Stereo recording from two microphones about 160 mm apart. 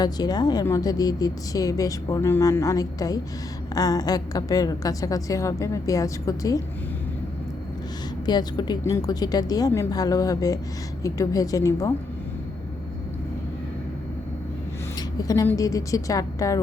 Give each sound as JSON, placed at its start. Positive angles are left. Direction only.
{"t": 0.0, "sound": "a woman's voice", "side_deg": 25}
{"t": 8.3, "sound": "a woman's voice", "side_deg": 25}
{"t": 15.2, "sound": "a woman's voice", "side_deg": 20}